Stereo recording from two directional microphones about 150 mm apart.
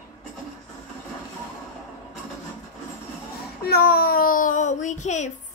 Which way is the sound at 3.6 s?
90° left.